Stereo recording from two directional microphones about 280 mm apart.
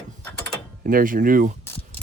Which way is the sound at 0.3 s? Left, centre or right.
Centre.